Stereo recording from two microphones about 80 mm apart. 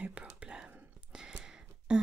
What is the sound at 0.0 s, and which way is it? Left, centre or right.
Whispering, centre.